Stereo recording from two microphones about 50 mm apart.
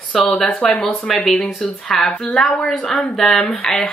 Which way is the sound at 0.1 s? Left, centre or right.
Centre.